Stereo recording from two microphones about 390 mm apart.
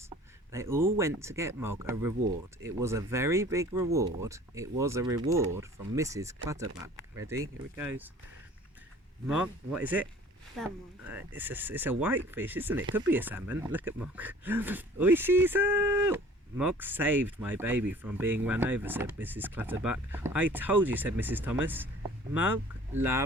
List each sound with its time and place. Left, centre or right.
0.5 s speech: centre
9.2 s speech: centre